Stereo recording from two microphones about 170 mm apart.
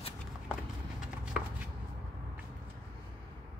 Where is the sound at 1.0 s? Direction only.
5° right (ahead or behind).